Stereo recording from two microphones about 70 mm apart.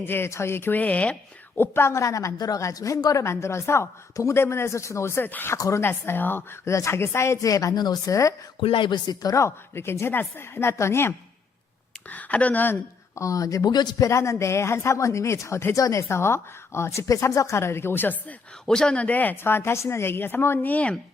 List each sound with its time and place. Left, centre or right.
0.0 s speech: left
1.5 s a woman's voice: left
3.2 s speech: left
5.5 s a woman's voice: left
5.8 s speech: left
6.7 s speech: left
7.4 s speech: left
7.8 s a woman's voice: left
8.9 s speech: left
9.3 s speech: left
12.0 s speech: left
13.1 s speech: left
14.0 s a woman's voice: left
18.6 s speech: centre